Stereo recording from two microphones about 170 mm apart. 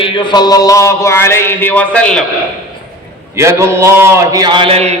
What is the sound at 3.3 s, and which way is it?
A man's voice, 15° right (ahead or behind).